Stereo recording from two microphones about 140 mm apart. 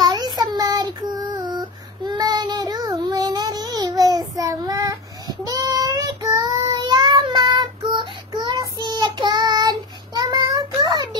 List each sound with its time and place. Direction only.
0.0 s child singing: 30° right (ahead or behind)